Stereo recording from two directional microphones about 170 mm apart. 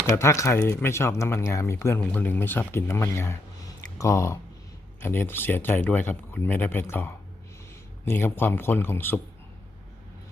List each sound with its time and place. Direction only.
0.2 s speech: 15° left (ahead or behind)